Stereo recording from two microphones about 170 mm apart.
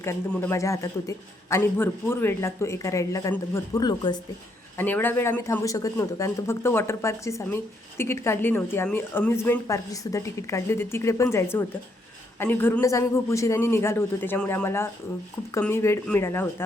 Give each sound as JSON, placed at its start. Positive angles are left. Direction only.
{"t": 0.0, "sound": "speech", "side_deg": 15}
{"t": 4.8, "sound": "speech", "side_deg": 10}